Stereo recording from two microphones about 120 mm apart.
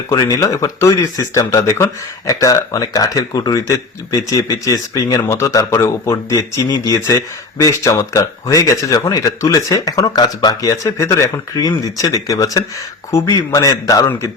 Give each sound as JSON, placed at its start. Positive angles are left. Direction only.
{"t": 0.1, "sound": "speech", "side_deg": 30}